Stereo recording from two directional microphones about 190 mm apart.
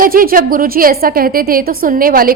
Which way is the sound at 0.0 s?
50° right (ahead or behind).